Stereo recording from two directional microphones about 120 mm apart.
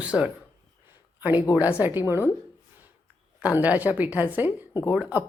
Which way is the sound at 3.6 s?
15° right (ahead or behind).